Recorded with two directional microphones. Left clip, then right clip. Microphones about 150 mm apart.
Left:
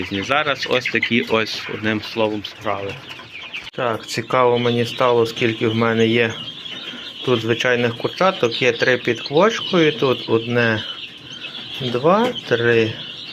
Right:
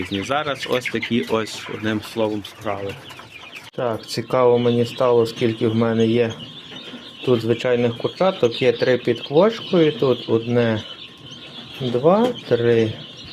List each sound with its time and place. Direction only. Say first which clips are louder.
0.2 s speech: left 5 dB; 20° right (ahead or behind)
4.1 s speech: even; 25° right (ahead or behind)
5.4 s speech: left 1 dB; 25° right (ahead or behind)
7.3 s speech: left 1 dB; 25° right (ahead or behind)
12.0 s speech: even; 25° right (ahead or behind)